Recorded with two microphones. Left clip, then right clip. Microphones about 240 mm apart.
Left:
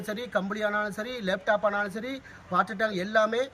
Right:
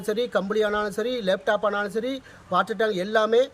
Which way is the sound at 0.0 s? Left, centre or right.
Right.